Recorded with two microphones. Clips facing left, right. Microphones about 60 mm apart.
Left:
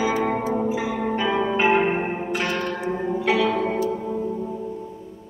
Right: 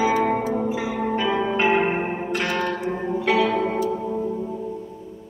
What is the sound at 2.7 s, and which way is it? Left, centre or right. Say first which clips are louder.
Music: even; centre.